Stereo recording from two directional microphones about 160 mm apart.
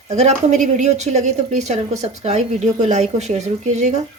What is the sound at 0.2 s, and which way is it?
Speech, 45° right (ahead or behind).